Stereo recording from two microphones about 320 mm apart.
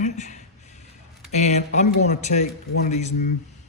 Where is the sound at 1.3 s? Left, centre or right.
Left.